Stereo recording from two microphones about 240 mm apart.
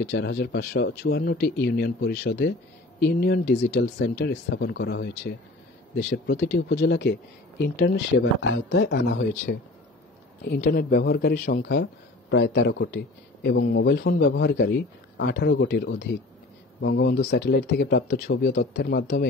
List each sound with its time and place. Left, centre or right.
0.1 s speech: left